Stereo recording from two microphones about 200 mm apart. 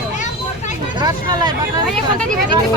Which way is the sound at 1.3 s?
20° right (ahead or behind).